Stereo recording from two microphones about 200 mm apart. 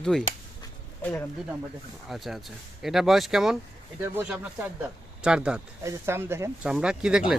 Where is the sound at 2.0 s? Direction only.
Centre (ahead or behind).